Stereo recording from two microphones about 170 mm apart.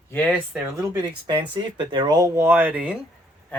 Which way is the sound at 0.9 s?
25° right (ahead or behind).